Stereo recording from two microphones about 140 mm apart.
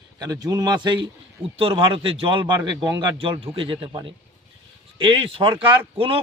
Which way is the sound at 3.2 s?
40° right (ahead or behind).